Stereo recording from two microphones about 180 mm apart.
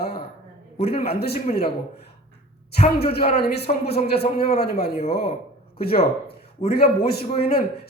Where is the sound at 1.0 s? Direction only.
60° left (ahead or behind).